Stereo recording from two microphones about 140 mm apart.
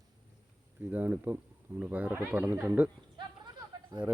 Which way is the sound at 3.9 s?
25° right (ahead or behind).